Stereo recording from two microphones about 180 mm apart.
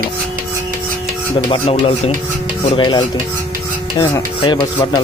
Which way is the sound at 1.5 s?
30° left (ahead or behind).